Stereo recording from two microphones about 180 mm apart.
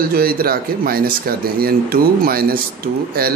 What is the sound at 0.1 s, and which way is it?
Speech, 55° right (ahead or behind).